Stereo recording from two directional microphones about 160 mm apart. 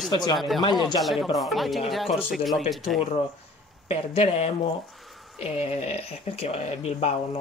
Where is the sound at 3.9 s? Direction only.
40° left (ahead or behind).